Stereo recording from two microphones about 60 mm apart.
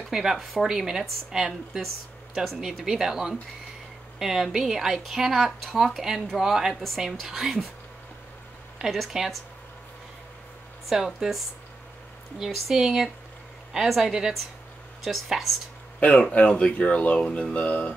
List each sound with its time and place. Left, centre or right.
0.1 s a woman's voice: centre
8.9 s speech: centre
10.9 s speech: centre
16.4 s speech: centre